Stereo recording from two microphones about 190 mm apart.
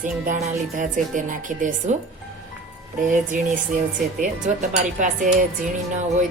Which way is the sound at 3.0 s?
45° right (ahead or behind).